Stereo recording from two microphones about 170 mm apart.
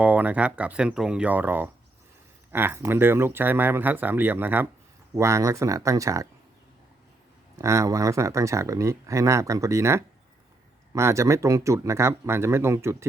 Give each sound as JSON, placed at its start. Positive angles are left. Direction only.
{"t": 0.0, "sound": "speech", "side_deg": -10}
{"t": 7.6, "sound": "speech", "side_deg": -20}